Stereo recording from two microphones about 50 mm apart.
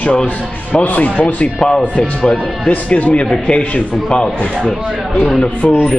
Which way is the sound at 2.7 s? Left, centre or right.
Left.